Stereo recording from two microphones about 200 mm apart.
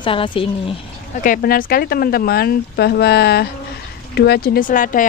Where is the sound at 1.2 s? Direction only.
45° left (ahead or behind).